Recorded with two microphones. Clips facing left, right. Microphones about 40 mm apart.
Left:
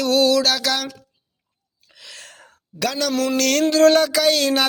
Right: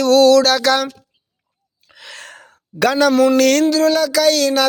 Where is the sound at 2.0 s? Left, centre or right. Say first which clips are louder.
Right 5 dB; right.